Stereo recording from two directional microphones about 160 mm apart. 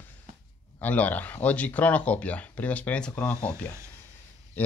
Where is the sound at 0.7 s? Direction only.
10° left (ahead or behind).